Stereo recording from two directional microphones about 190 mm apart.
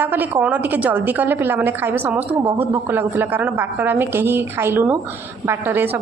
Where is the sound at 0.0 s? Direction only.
10° right (ahead or behind).